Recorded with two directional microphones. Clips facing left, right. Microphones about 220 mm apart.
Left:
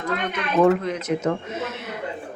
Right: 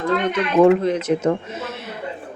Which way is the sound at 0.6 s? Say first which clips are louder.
Right 4 dB; 30° right (ahead or behind).